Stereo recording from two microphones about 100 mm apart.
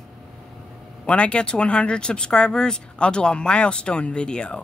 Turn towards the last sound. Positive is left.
turn(degrees=10)  # may be behind; listen again after turning